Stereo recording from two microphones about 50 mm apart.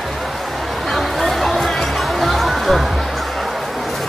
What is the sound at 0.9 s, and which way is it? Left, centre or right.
Chatter, centre.